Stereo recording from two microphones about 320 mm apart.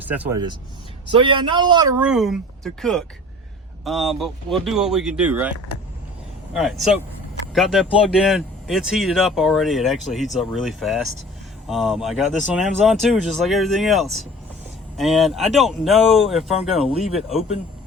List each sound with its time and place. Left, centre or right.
0.0 s speech: centre